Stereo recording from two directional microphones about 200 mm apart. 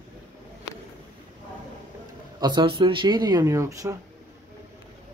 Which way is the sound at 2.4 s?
20° right (ahead or behind).